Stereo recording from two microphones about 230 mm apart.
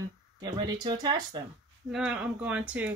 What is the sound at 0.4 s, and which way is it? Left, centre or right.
Speech, centre.